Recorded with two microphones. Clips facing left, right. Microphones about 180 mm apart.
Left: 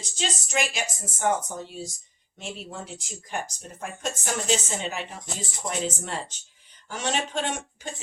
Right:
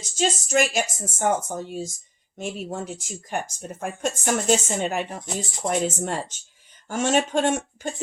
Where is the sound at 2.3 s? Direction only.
50° right (ahead or behind).